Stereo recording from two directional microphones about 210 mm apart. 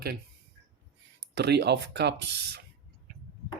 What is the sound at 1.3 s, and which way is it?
Speech, 50° right (ahead or behind).